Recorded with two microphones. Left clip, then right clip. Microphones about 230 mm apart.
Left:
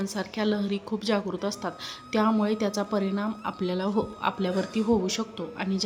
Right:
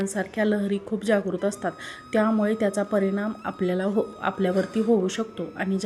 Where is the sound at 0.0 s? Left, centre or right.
Centre.